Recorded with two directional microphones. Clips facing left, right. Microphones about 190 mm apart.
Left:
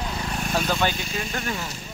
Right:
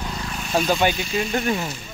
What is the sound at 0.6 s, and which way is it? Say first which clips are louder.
Speech: right 4 dB; 20° right (ahead or behind).